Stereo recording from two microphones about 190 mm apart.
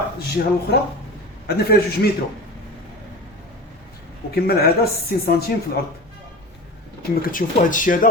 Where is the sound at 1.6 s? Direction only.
55° left (ahead or behind).